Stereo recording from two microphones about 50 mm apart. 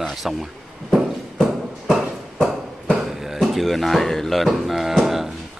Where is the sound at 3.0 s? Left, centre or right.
Centre.